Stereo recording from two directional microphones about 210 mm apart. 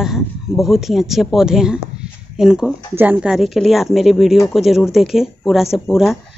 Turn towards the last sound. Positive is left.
turn(degrees=0)  # may be behind; listen again after turning